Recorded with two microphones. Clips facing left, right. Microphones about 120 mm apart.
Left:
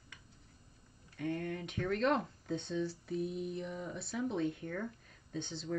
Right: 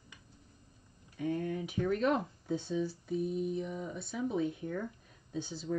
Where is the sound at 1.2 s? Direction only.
5° right (ahead or behind).